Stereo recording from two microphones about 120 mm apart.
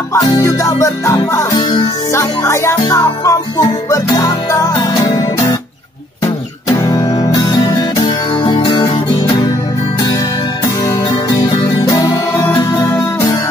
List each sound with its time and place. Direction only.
0.1 s music: 25° left (ahead or behind)
1.6 s music: 40° left (ahead or behind)
2.1 s music: 25° left (ahead or behind)
6.8 s music: 30° left (ahead or behind)
9.9 s music: 30° left (ahead or behind)